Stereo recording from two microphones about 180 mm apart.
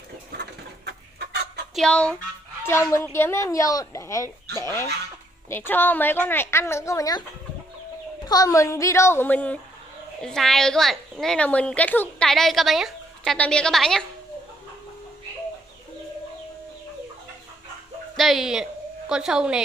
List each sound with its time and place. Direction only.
0.3 s chicken: 65° right (ahead or behind)
1.8 s a woman's voice: 5° left (ahead or behind)
8.3 s a woman's voice: 20° left (ahead or behind); by 14.0 s 5° left (ahead or behind)
18.1 s a woman's voice: centre (ahead or behind)